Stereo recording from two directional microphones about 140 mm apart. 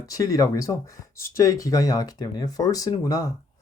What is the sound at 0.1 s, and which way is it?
Speech, 25° left (ahead or behind).